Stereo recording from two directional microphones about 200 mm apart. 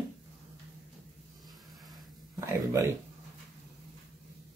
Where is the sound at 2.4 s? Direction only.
15° right (ahead or behind).